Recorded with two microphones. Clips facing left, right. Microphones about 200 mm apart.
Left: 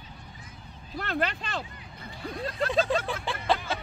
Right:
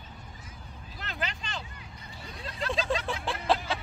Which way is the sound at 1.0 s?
55° left (ahead or behind).